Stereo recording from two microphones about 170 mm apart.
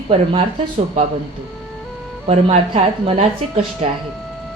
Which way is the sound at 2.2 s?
40° right (ahead or behind).